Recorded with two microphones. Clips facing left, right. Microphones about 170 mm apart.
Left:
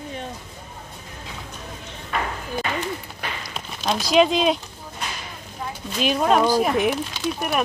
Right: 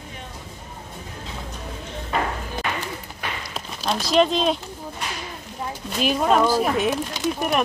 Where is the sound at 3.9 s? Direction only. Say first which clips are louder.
Left 1 dB; centre (ahead or behind).